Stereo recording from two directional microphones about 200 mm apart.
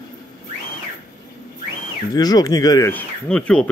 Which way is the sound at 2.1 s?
20° left (ahead or behind).